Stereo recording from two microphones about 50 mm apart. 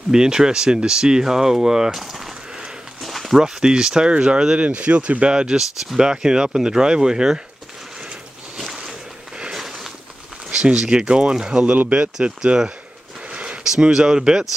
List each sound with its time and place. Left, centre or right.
0.1 s speech: centre
3.3 s speech: centre
8.5 s boat: centre
9.4 s a sound: centre
10.5 s speech: centre
13.3 s a sound: right
13.7 s speech: centre